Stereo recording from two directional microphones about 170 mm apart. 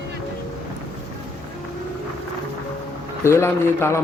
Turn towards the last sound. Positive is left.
turn(degrees=15)  # may be behind; listen again after turning